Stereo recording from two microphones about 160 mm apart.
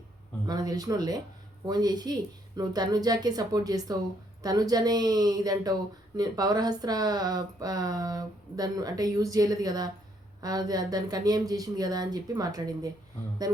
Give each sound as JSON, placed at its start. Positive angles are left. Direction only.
{"t": 0.4, "sound": "speech", "side_deg": -25}